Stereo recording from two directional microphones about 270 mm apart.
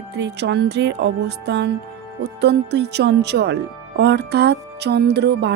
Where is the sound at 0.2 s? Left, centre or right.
Right.